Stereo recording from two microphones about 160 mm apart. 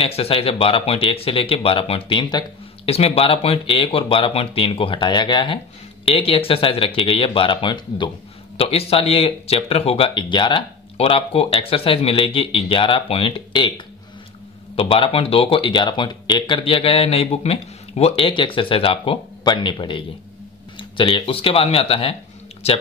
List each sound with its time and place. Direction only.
0.0 s speech: 35° left (ahead or behind)